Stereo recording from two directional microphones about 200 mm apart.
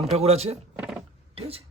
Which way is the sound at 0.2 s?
30° right (ahead or behind).